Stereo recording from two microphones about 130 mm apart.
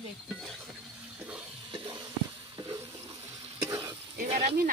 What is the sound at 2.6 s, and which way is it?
Water, 40° right (ahead or behind).